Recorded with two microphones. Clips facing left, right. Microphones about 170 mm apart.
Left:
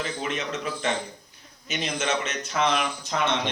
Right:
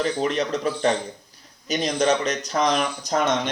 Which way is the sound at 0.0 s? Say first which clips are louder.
Right 7 dB; 40° right (ahead or behind).